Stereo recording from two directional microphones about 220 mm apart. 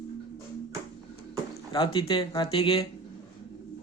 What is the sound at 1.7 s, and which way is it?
Speech, 20° left (ahead or behind).